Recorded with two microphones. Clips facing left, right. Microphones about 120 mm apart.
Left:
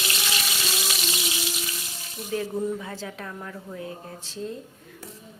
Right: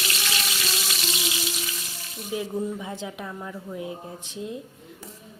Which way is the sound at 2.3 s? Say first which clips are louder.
Left 1 dB; 15° right (ahead or behind).